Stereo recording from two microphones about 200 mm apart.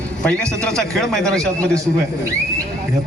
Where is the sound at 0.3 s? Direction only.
5° left (ahead or behind).